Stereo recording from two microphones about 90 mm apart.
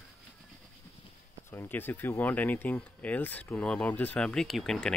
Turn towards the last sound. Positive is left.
turn(degrees=5)  # may be behind; listen again after turning